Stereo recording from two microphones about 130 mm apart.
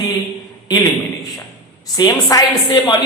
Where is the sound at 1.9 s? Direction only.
25° left (ahead or behind).